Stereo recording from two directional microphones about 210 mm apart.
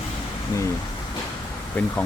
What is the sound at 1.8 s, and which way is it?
Speech, 5° left (ahead or behind).